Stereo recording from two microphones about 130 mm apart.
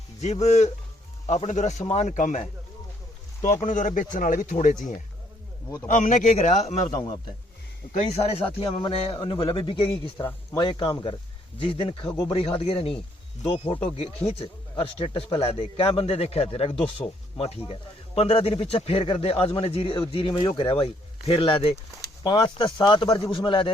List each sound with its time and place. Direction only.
0.2 s speech: 60° left (ahead or behind); by 2.5 s 75° left (ahead or behind)
3.6 s speech: 75° left (ahead or behind)
6.1 s speech: 70° left (ahead or behind)
6.8 s speech: 35° left (ahead or behind)
7.9 s speech: 55° left (ahead or behind)
10.2 s speech: 25° left (ahead or behind)
11.6 s speech: 45° left (ahead or behind)
13.9 s speech: 50° left (ahead or behind)